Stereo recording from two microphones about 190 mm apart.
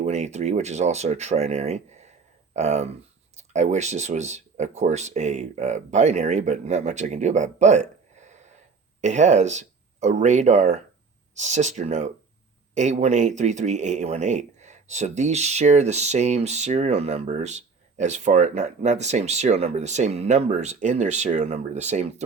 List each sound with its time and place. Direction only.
0.0 s speech: 35° right (ahead or behind)